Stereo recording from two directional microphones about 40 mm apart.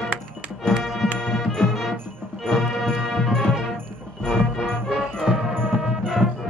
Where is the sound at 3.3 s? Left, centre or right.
Centre.